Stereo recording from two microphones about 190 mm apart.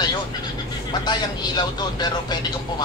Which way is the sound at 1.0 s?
20° left (ahead or behind).